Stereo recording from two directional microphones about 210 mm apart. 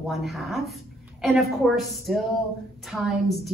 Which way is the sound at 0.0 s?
Centre (ahead or behind).